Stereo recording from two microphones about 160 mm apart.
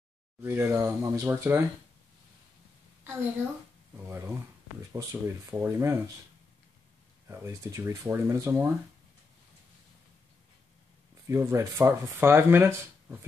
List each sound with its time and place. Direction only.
0.4 s speech: 15° right (ahead or behind)
3.9 s speech: 15° right (ahead or behind)
7.2 s speech: 20° right (ahead or behind)
11.2 s speech: 20° right (ahead or behind)